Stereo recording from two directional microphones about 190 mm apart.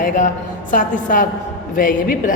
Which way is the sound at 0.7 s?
40° left (ahead or behind).